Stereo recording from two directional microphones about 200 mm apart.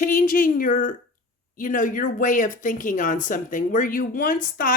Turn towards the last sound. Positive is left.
turn(degrees=45)  # may be behind; listen again after turning